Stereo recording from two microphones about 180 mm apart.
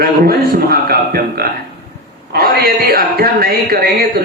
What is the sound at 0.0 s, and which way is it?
A man's voice, 60° right (ahead or behind).